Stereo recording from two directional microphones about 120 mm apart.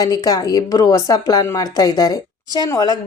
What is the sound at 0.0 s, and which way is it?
A woman's voice, 30° left (ahead or behind).